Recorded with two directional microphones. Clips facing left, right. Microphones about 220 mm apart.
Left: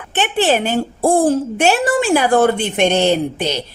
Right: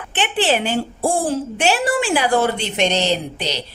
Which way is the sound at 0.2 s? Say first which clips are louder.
Left 3 dB; 45° left (ahead or behind).